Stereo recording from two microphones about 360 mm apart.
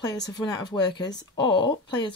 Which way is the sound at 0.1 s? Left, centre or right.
Centre.